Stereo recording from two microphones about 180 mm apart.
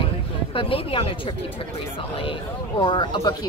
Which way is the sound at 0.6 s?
30° left (ahead or behind).